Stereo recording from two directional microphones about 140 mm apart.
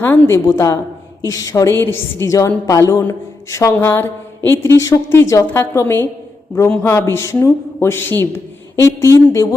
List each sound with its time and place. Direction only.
0.0 s a woman's voice: 15° left (ahead or behind)